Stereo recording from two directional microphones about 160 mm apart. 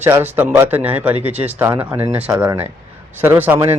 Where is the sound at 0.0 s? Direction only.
15° right (ahead or behind).